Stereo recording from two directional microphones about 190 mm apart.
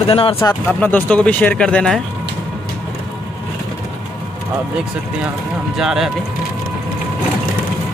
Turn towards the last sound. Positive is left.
turn(degrees=0)  # may be behind; listen again after turning